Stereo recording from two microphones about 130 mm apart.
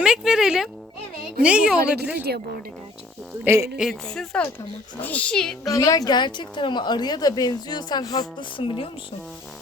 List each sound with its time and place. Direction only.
0.0 s a woman's voice: 5° right (ahead or behind)
3.4 s a woman's voice: 20° right (ahead or behind)
3.8 s a woman's voice: centre (ahead or behind)
5.6 s a woman's voice: 25° left (ahead or behind); by 8.9 s 45° left (ahead or behind)